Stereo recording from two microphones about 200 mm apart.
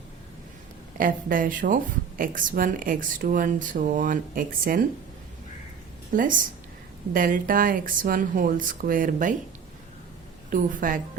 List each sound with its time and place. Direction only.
0.9 s speech: 45° right (ahead or behind)
6.1 s speech: 40° right (ahead or behind)
10.5 s speech: 40° right (ahead or behind)